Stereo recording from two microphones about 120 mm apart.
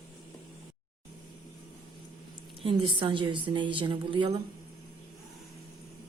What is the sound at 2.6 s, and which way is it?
A woman's voice, 45° right (ahead or behind).